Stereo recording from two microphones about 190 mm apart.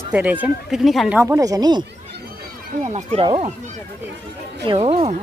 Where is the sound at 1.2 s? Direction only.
15° right (ahead or behind).